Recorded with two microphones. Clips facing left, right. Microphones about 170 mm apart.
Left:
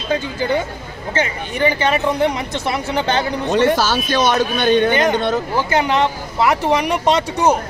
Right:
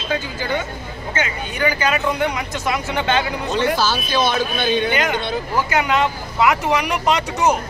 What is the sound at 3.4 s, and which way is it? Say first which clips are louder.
Speech: left 6 dB; 55° left (ahead or behind).